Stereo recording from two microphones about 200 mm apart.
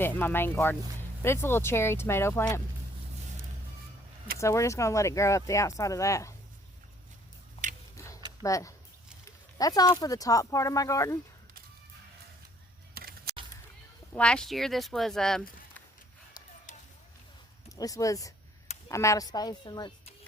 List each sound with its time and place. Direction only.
0.0 s speech: 10° left (ahead or behind)
4.4 s speech: 15° left (ahead or behind)
7.6 s tick-tock: 30° left (ahead or behind)
7.9 s a sound: 15° left (ahead or behind)
8.4 s speech: 15° left (ahead or behind)
12.9 s a sound: 50° right (ahead or behind)
14.1 s speech: 5° left (ahead or behind)
16.7 s a sound: 40° left (ahead or behind)
17.7 s speech: 15° left (ahead or behind)